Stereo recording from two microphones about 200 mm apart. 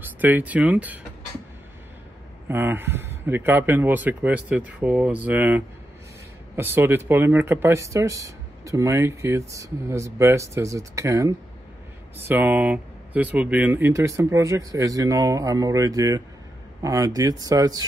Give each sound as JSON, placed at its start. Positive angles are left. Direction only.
{"t": 0.0, "sound": "speech", "side_deg": -10}
{"t": 2.4, "sound": "speech", "side_deg": -10}